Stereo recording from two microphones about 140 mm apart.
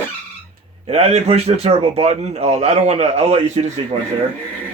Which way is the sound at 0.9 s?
45° right (ahead or behind).